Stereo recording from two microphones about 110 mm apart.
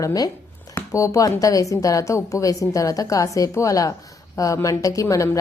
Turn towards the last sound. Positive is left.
turn(degrees=30)  # may be behind; listen again after turning